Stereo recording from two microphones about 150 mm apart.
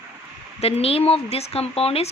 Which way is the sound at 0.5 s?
45° left (ahead or behind).